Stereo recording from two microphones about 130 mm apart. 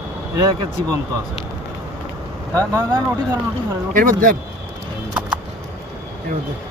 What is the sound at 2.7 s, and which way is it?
Speech, 20° right (ahead or behind).